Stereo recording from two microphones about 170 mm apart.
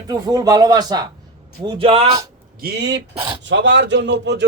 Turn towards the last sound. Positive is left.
turn(degrees=-90)